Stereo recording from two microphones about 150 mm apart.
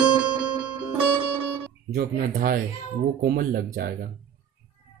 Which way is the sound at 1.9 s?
65° right (ahead or behind).